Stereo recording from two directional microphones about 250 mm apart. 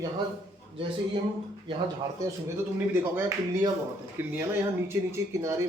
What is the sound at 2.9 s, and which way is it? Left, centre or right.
A man's voice, centre.